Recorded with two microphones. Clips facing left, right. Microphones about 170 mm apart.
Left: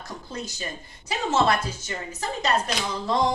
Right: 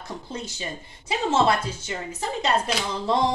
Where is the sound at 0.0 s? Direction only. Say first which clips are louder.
Right 1 dB; 25° right (ahead or behind).